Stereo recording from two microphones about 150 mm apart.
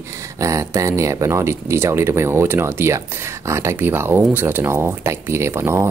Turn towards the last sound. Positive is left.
turn(degrees=-15)  # may be behind; listen again after turning